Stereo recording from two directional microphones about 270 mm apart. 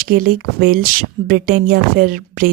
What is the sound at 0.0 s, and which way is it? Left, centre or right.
Speech, right.